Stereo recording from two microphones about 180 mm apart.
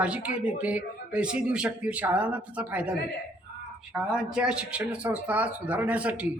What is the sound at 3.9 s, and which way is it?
Speech, 5° right (ahead or behind).